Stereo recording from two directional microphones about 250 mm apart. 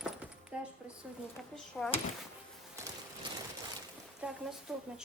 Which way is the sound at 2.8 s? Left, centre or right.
Centre.